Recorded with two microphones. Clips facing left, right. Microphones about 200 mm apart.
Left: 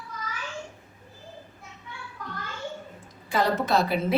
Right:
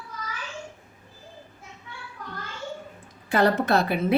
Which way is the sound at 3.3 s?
60° right (ahead or behind).